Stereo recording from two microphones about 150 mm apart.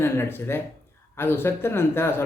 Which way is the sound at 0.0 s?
15° left (ahead or behind).